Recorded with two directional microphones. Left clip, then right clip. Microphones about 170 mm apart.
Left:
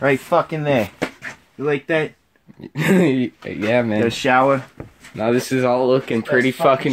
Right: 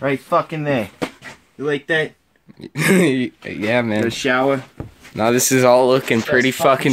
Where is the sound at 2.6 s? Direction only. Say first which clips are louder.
Right 2 dB; 10° left (ahead or behind).